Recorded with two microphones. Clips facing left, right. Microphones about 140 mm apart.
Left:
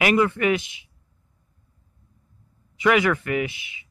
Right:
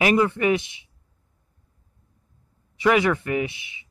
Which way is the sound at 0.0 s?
25° right (ahead or behind).